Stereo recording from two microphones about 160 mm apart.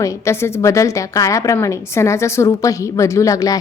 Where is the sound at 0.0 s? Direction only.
20° left (ahead or behind).